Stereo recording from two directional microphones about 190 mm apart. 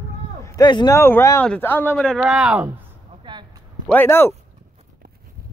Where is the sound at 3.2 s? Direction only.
25° right (ahead or behind).